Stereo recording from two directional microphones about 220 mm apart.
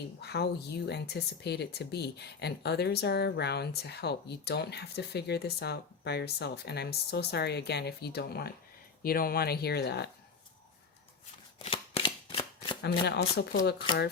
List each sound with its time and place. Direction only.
0.2 s speech: 50° left (ahead or behind)
11.6 s shuffling cards: 25° left (ahead or behind)
12.8 s speech: 50° left (ahead or behind)